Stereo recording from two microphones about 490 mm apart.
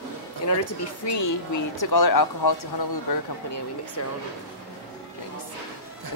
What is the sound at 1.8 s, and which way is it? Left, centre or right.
A woman's voice, left.